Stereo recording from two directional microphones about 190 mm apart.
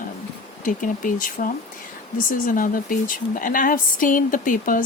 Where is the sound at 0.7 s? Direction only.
45° left (ahead or behind).